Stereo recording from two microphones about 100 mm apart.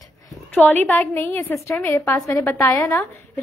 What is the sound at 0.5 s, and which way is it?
A woman's voice, 15° left (ahead or behind).